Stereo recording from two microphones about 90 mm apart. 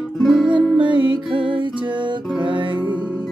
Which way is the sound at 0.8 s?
60° right (ahead or behind).